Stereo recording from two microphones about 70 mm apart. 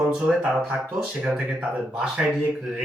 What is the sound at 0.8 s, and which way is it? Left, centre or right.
A man's voice, centre.